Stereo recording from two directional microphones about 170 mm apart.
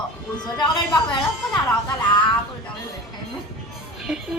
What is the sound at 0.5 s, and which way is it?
Speech, 25° left (ahead or behind).